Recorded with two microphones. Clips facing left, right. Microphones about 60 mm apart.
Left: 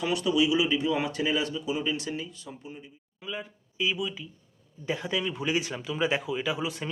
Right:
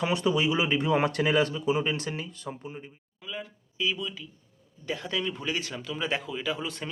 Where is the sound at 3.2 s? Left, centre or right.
Centre.